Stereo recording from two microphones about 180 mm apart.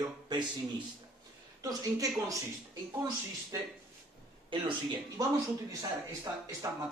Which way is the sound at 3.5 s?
15° right (ahead or behind).